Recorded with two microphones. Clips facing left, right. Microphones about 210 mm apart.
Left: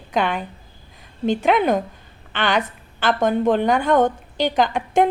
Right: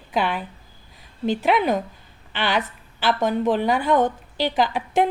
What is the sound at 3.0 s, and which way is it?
Speech, 45° left (ahead or behind).